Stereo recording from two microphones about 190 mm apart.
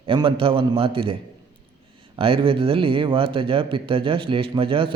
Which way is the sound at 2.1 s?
30° right (ahead or behind).